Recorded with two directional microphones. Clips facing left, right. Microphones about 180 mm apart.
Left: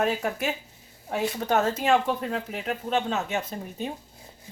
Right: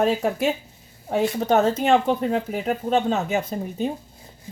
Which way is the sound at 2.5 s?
40° right (ahead or behind).